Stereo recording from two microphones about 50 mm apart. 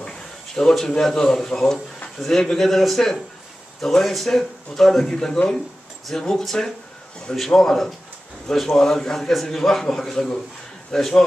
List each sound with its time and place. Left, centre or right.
0.6 s a man's voice: centre
5.1 s a man's voice: centre